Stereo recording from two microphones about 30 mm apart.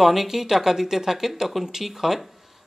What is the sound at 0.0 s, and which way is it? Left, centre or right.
Speech, centre.